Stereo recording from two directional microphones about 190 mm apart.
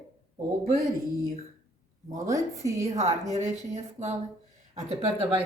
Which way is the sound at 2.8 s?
35° right (ahead or behind).